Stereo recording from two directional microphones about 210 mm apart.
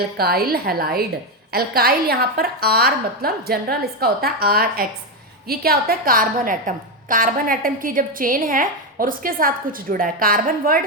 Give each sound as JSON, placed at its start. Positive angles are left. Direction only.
{"t": 0.2, "sound": "a woman's voice", "side_deg": -45}